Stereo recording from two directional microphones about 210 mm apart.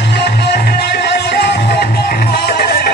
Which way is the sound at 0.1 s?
50° left (ahead or behind).